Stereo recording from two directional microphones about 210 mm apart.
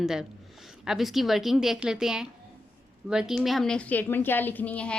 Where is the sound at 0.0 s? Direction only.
5° right (ahead or behind).